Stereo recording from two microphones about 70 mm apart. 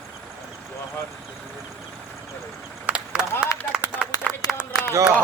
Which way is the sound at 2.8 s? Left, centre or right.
Centre.